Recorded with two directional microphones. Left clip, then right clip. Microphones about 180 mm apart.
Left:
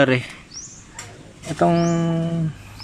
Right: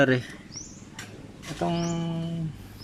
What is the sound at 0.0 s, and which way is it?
Speech, centre (ahead or behind).